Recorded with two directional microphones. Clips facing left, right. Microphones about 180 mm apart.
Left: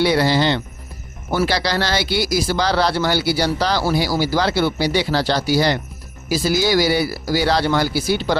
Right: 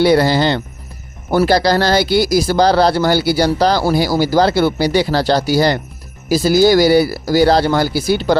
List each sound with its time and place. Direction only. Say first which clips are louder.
0.0 s speech: right 4 dB; 45° right (ahead or behind)